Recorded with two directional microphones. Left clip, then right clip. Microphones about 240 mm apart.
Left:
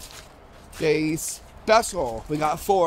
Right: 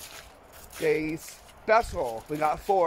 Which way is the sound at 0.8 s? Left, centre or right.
Centre.